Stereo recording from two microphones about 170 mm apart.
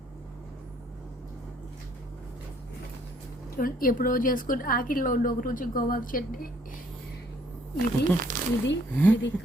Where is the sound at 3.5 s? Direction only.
55° left (ahead or behind).